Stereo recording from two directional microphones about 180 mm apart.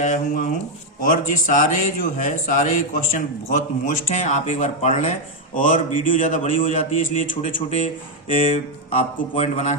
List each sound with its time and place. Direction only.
0.0 s a man's voice: 45° left (ahead or behind)
9.0 s a man's voice: 35° left (ahead or behind)